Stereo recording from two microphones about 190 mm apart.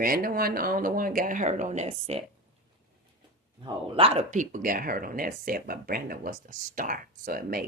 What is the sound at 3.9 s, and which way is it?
Speech, 30° right (ahead or behind).